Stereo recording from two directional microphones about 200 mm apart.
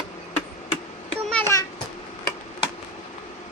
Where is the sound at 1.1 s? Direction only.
5° left (ahead or behind).